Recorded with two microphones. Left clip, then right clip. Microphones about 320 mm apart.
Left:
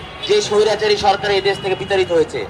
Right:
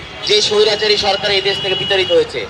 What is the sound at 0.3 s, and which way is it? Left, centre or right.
A man's voice, left.